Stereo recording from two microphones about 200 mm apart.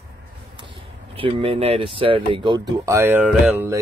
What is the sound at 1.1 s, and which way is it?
Speech, 25° right (ahead or behind).